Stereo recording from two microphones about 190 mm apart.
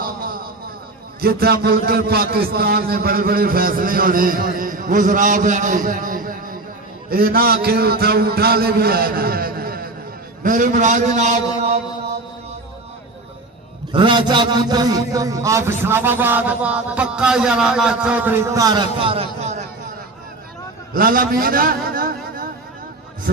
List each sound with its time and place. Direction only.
0.0 s a sound: 50° right (ahead or behind)
1.2 s a man's voice: 55° right (ahead or behind)
13.9 s a man's voice: 25° right (ahead or behind)
20.9 s a man's voice: 50° right (ahead or behind)